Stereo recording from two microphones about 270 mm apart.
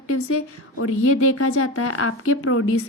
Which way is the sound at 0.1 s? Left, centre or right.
Left.